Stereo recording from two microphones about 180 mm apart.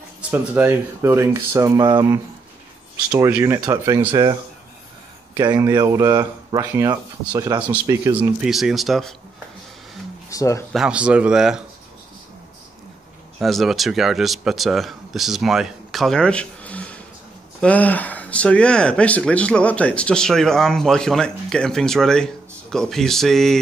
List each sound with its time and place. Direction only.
0.3 s speech: 10° right (ahead or behind)
3.2 s speech: 10° right (ahead or behind)
5.4 s speech: 20° right (ahead or behind)
8.2 s speech: 5° right (ahead or behind)
10.3 s speech: 15° left (ahead or behind)
10.7 s speech: 5° right (ahead or behind)
13.4 s speech: centre (ahead or behind)